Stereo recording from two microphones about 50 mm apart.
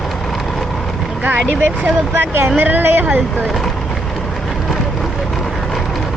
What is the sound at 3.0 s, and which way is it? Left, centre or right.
Speech, right.